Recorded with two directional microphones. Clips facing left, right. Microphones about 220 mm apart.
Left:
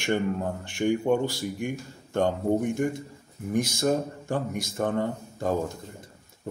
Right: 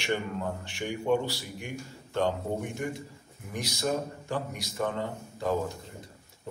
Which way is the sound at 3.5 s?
50° left (ahead or behind).